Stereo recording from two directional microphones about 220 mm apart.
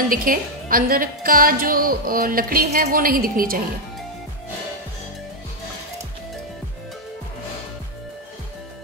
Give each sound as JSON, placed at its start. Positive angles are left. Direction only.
{"t": 0.1, "sound": "a woman's voice", "side_deg": -40}